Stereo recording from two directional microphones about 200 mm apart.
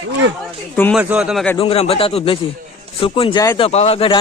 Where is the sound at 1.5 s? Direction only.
30° left (ahead or behind).